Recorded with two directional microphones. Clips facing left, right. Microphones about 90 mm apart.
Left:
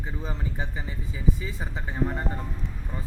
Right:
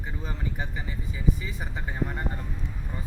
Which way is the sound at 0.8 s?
25° left (ahead or behind).